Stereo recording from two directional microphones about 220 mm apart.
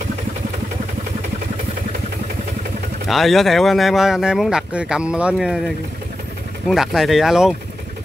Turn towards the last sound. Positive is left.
turn(degrees=0)  # may be behind; listen again after turning